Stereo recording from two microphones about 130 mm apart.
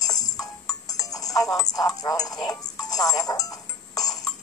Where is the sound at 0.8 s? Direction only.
30° left (ahead or behind).